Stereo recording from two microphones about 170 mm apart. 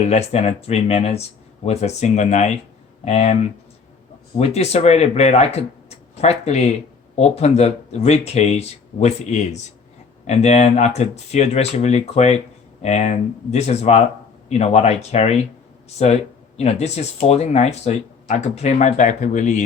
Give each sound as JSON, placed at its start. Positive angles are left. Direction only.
{"t": 0.1, "sound": "speech", "side_deg": 40}
{"t": 4.4, "sound": "speech", "side_deg": 40}
{"t": 16.6, "sound": "speech", "side_deg": 40}